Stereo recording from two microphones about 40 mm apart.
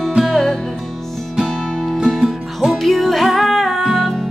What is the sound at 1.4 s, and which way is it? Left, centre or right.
Music, centre.